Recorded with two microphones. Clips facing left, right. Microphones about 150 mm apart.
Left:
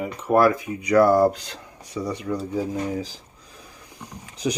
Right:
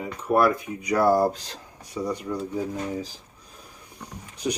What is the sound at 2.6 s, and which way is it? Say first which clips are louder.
Speech: left 3 dB; 90° left.